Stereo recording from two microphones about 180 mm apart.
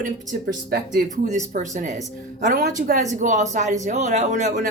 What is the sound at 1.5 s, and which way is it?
A woman's voice, 45° right (ahead or behind).